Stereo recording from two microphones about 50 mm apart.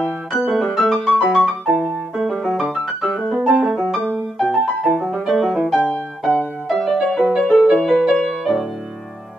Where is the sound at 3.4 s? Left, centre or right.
Centre.